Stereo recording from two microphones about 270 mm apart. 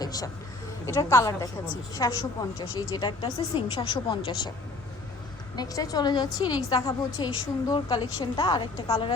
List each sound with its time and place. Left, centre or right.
0.0 s a sound: centre
0.9 s a woman's voice: centre
5.5 s a woman's voice: centre